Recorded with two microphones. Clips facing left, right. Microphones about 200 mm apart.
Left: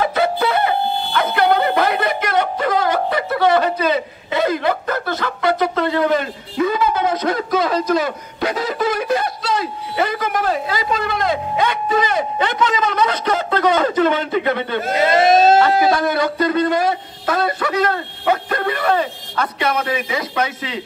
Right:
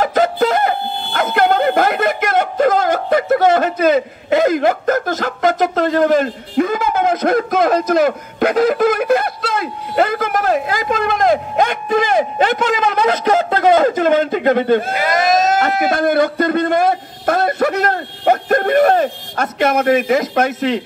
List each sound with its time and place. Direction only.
0.0 s speech: 45° right (ahead or behind)
15.0 s speech: 30° left (ahead or behind)
16.0 s a man's voice: 50° right (ahead or behind)